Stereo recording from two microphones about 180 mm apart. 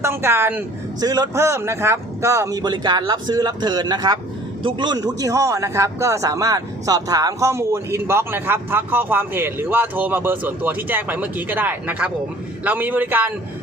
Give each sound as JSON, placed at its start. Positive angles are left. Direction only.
{"t": 0.0, "sound": "a man's voice", "side_deg": -15}